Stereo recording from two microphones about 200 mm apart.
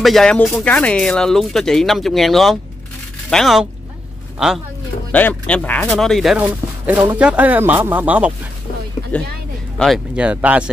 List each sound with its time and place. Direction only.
0.0 s speech: centre (ahead or behind)
5.1 s speech: 5° left (ahead or behind)
9.1 s speech: 5° left (ahead or behind)